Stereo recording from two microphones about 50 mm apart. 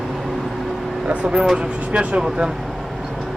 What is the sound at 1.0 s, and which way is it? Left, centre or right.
Speech, right.